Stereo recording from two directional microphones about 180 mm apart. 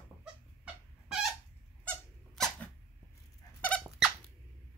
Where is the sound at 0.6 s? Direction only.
Centre (ahead or behind).